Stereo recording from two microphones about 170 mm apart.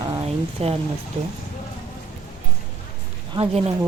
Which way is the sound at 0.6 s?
35° right (ahead or behind).